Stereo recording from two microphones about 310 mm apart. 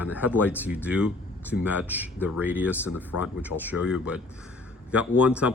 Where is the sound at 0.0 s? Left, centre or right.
Centre.